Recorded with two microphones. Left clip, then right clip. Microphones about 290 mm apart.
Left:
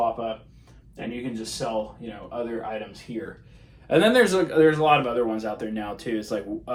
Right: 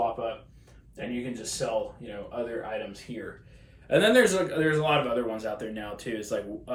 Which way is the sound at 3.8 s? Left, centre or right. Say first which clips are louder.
Left 2 dB; centre.